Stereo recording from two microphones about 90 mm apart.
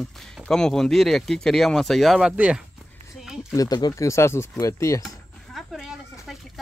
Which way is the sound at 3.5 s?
45° left (ahead or behind).